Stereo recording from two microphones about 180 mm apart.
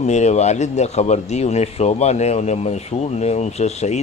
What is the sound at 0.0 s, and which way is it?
Speech, 40° left (ahead or behind).